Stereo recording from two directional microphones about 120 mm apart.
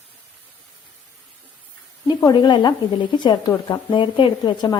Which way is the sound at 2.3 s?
40° left (ahead or behind).